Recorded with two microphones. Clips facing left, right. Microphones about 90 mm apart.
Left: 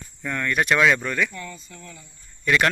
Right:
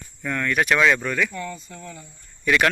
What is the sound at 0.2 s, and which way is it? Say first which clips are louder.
Speech: right 1 dB; centre (ahead or behind).